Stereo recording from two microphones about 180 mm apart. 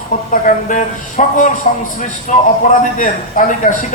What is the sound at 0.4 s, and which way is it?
A man's voice, 45° left (ahead or behind).